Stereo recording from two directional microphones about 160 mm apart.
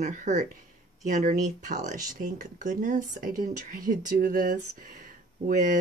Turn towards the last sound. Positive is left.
turn(degrees=-55)  # may be behind; listen again after turning